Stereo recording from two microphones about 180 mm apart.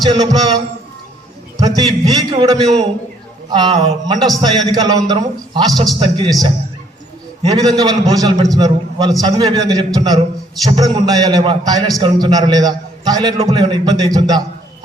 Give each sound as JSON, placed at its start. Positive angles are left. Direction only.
{"t": 0.0, "sound": "a man's voice", "side_deg": -20}
{"t": 1.5, "sound": "a man's voice", "side_deg": -20}
{"t": 5.7, "sound": "a man's voice", "side_deg": 0}
{"t": 6.0, "sound": "a man's voice", "side_deg": -25}
{"t": 7.8, "sound": "a man's voice", "side_deg": -20}